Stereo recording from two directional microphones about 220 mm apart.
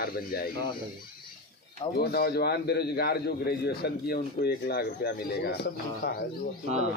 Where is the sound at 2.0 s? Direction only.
45° left (ahead or behind).